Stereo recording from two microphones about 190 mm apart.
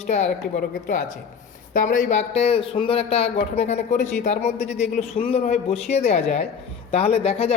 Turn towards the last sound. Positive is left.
turn(degrees=30)  # may be behind; listen again after turning